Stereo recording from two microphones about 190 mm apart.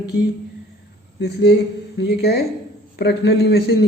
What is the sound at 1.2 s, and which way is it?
A woman's voice, 65° left (ahead or behind).